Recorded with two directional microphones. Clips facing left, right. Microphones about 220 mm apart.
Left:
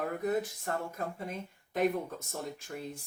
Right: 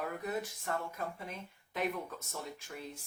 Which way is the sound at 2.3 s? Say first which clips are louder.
Left 5 dB; 45° left (ahead or behind).